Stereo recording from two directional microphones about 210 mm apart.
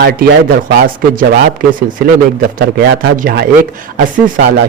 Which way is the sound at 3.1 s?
45° right (ahead or behind).